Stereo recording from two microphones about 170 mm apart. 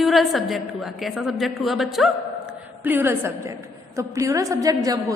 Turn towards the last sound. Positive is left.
turn(degrees=-20)  # may be behind; listen again after turning